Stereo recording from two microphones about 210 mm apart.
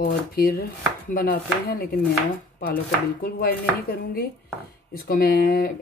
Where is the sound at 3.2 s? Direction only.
45° left (ahead or behind).